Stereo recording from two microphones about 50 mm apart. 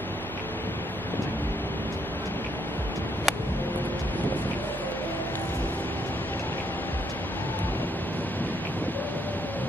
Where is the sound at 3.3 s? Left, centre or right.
Centre.